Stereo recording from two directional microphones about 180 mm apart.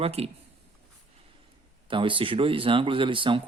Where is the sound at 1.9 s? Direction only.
30° right (ahead or behind).